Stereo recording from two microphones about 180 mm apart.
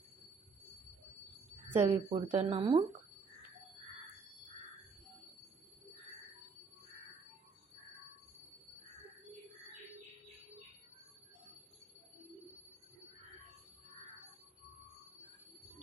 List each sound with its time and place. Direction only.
1.7 s speech: 35° right (ahead or behind)